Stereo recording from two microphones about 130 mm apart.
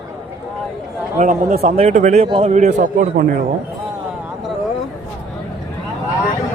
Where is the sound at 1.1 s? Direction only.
70° right (ahead or behind).